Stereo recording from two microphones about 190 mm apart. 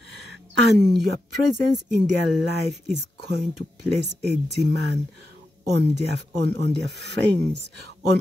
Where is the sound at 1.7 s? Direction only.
65° right (ahead or behind).